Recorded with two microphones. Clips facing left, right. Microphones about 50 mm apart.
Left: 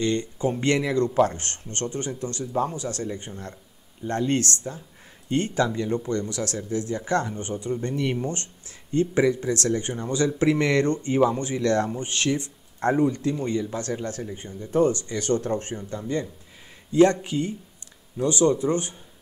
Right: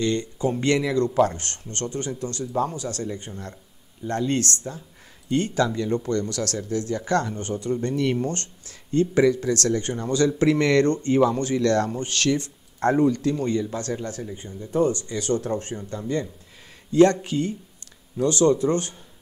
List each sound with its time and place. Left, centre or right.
0.0 s speech: left
5.8 s speech: centre
14.6 s speech: left